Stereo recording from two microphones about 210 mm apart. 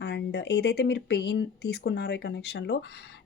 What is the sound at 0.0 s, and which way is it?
Speech, 55° left (ahead or behind).